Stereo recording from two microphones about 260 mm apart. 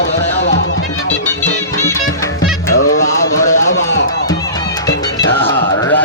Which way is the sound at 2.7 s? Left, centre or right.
Left.